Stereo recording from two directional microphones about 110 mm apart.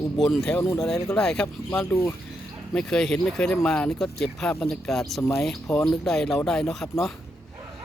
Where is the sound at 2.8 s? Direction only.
5° left (ahead or behind).